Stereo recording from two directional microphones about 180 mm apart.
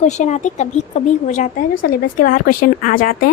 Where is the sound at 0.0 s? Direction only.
40° left (ahead or behind).